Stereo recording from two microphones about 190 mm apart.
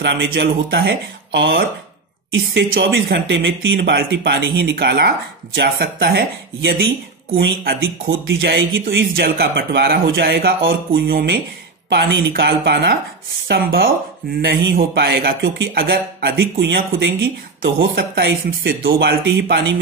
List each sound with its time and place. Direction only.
0.0 s speech: 65° right (ahead or behind)
2.3 s speech: 80° right
8.8 s speech: 60° right (ahead or behind)
14.4 s speech: 65° right (ahead or behind)